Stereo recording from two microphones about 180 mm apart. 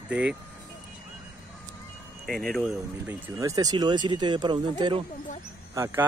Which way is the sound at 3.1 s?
20° right (ahead or behind).